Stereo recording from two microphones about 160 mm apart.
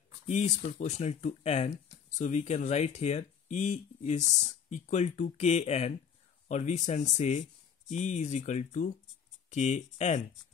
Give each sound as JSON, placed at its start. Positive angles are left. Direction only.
{"t": 0.3, "sound": "speech", "side_deg": 45}